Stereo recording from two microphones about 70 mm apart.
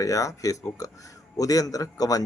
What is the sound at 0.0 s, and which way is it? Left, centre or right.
Speech, left.